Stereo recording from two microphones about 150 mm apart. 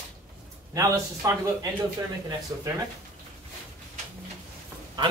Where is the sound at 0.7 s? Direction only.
20° right (ahead or behind).